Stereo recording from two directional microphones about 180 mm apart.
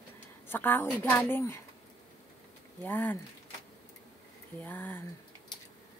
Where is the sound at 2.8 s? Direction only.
10° left (ahead or behind).